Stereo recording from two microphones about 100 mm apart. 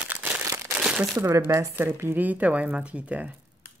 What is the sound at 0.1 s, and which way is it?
Crumpling, 15° right (ahead or behind).